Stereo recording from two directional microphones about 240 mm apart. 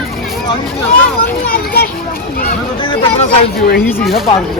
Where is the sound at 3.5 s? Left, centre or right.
Left.